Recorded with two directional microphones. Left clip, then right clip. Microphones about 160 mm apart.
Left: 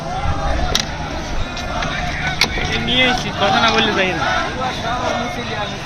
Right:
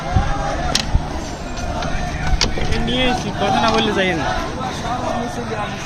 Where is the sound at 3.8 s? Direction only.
90° right.